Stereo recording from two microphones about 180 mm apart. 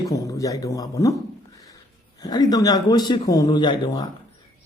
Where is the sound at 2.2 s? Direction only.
20° left (ahead or behind).